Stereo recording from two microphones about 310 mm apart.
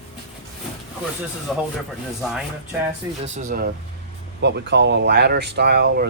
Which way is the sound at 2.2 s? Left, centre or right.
Centre.